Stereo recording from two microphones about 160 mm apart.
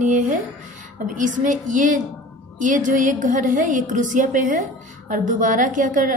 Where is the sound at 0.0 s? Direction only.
50° right (ahead or behind).